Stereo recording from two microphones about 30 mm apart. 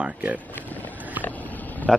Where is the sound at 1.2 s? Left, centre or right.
Left.